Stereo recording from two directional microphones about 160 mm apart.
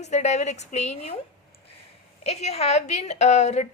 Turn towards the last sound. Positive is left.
turn(degrees=45)  # may be behind; listen again after turning